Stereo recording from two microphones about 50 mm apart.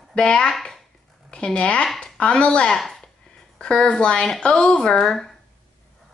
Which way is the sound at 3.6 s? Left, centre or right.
Centre.